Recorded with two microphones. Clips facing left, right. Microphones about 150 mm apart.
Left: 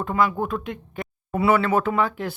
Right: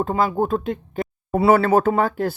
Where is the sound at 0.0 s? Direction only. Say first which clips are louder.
Right 3 dB; 30° right (ahead or behind).